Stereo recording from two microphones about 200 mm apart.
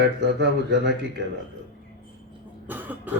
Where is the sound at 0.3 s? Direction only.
55° right (ahead or behind).